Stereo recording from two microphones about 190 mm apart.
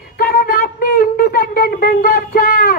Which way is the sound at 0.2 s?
50° left (ahead or behind).